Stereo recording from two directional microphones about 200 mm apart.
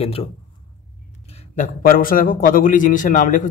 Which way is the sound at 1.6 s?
45° left (ahead or behind).